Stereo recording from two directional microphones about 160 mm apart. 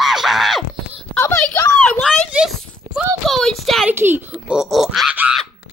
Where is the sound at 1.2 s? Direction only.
10° left (ahead or behind).